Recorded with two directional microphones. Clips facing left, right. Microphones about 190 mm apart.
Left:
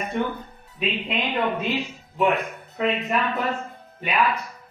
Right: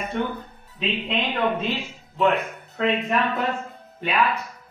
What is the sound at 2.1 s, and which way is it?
Speech, 15° left (ahead or behind).